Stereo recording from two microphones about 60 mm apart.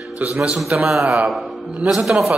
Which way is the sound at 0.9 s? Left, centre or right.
Centre.